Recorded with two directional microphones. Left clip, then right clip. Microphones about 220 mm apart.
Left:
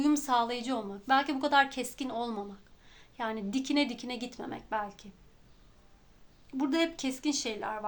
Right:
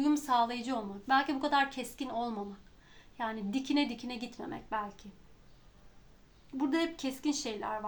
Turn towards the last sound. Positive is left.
turn(degrees=35)  # may be behind; listen again after turning